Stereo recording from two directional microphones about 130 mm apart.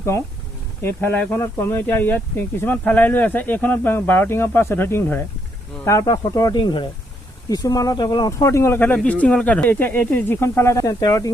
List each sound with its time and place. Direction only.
0.8 s speech: 20° left (ahead or behind)